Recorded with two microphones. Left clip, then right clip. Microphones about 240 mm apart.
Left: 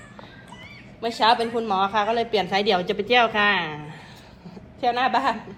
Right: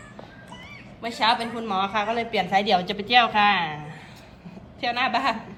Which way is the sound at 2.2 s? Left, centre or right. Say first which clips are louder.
Left 2 dB; centre.